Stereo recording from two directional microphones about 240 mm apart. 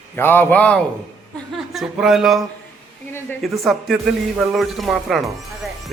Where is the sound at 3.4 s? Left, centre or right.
Centre.